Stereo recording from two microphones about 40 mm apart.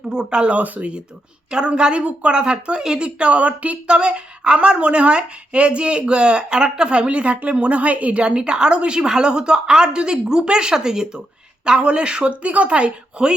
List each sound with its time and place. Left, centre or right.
0.1 s a woman's voice: right
3.8 s a woman's voice: right